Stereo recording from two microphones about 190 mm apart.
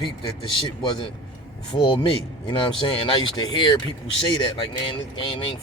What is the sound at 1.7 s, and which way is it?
Speech, 30° left (ahead or behind).